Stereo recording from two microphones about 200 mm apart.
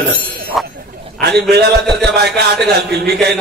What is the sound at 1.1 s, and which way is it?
Speech, 50° right (ahead or behind).